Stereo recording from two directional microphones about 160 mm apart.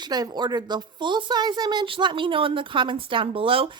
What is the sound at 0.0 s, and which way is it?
A woman's voice, 25° right (ahead or behind).